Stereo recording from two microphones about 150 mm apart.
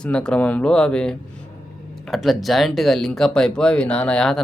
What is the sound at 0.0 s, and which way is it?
Speech, 5° left (ahead or behind).